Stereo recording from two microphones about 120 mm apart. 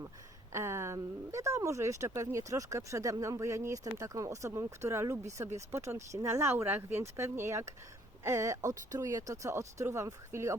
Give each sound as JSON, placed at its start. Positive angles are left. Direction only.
{"t": 0.5, "sound": "speech", "side_deg": -20}